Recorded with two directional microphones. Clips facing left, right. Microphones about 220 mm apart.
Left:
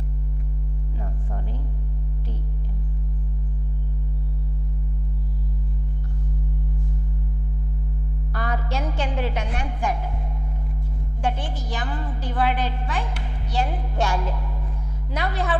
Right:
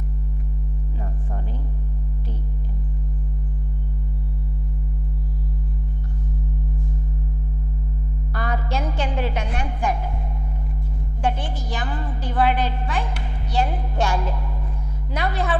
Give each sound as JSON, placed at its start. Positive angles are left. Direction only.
{"t": 8.3, "sound": "a woman's voice", "side_deg": -15}
{"t": 11.1, "sound": "a woman's voice", "side_deg": -10}